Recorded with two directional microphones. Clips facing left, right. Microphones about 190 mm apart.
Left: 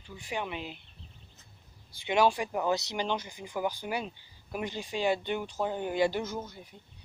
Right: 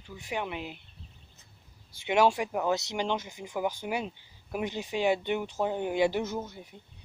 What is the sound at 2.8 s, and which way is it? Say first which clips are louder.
Speech: right 1 dB; 20° right (ahead or behind).